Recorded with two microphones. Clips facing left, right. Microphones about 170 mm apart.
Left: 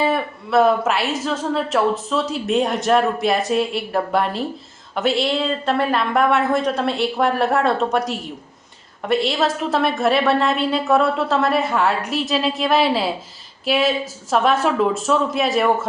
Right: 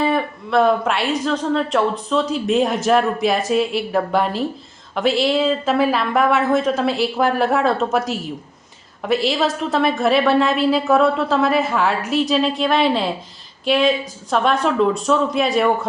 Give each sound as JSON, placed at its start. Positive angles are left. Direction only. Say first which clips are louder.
{"t": 0.0, "sound": "speech", "louder": "right 1 dB", "side_deg": 0}